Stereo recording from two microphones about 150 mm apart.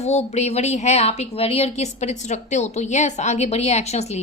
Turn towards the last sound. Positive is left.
turn(degrees=45)  # may be behind; listen again after turning